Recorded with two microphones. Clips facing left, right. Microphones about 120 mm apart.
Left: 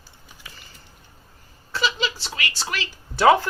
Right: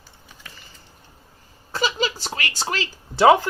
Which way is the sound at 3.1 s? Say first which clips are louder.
Right 2 dB; 20° right (ahead or behind).